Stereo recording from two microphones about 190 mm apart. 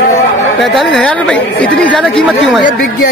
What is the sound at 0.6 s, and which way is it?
Speech, centre (ahead or behind).